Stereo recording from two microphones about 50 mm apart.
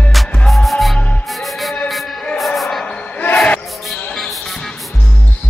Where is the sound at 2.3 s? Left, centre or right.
Centre.